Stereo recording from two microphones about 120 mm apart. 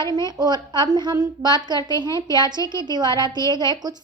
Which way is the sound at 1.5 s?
35° right (ahead or behind).